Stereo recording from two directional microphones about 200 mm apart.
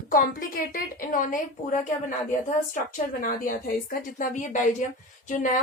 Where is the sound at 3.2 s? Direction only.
45° left (ahead or behind).